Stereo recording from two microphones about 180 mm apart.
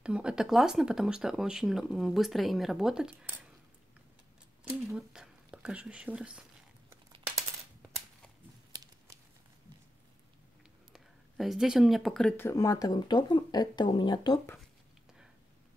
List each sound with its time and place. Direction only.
0.0 s speech: 5° right (ahead or behind)
4.6 s whispering: 5° right (ahead or behind)
8.7 s a sound: 20° right (ahead or behind)
10.9 s speech: centre (ahead or behind); by 14.6 s 15° left (ahead or behind)